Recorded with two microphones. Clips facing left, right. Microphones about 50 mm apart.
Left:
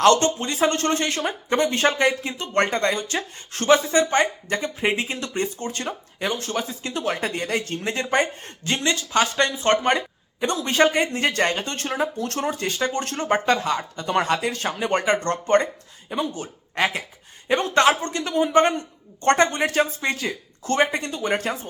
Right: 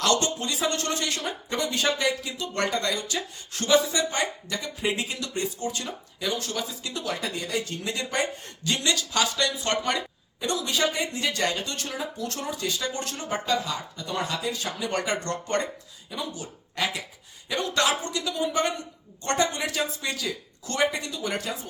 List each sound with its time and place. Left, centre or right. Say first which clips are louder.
0.0 s speech: left 7 dB; left